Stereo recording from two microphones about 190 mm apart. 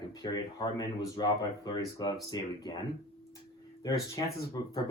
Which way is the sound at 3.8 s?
20° left (ahead or behind).